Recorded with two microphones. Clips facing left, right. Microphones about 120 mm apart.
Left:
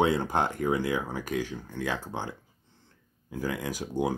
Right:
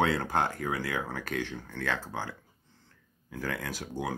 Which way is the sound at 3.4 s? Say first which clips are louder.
Left 3 dB; 15° left (ahead or behind).